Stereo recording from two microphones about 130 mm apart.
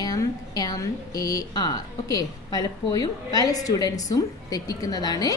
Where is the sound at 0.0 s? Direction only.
30° left (ahead or behind).